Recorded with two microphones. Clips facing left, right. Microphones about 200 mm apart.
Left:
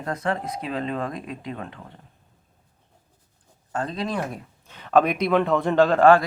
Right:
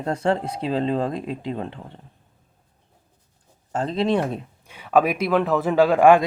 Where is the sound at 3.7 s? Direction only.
25° right (ahead or behind).